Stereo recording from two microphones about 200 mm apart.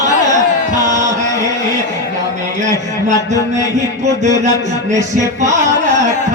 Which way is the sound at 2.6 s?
35° right (ahead or behind).